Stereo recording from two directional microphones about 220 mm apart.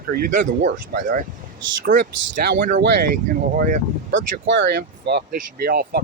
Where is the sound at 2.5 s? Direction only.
45° right (ahead or behind).